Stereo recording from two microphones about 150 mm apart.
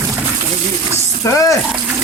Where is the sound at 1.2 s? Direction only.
20° left (ahead or behind).